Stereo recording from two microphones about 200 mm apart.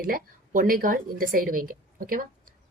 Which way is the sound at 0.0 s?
45° right (ahead or behind).